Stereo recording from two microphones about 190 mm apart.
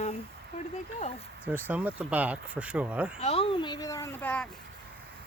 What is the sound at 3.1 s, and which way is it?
Speech, 30° left (ahead or behind).